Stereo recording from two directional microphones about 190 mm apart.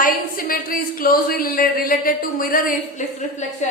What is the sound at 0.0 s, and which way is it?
Speech, 50° left (ahead or behind).